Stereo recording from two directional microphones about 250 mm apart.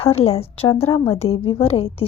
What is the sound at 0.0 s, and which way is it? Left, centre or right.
A woman's voice, left.